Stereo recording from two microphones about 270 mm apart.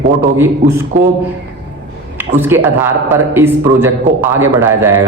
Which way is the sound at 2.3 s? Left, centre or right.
Centre.